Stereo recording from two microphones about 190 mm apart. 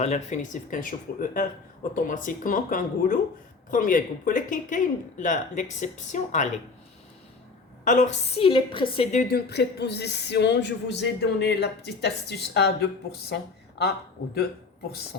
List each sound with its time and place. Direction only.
0.0 s speech: 40° left (ahead or behind)
7.9 s a woman's voice: 40° left (ahead or behind)
9.1 s a woman's voice: 55° left (ahead or behind)
15.1 s a sound: 60° left (ahead or behind)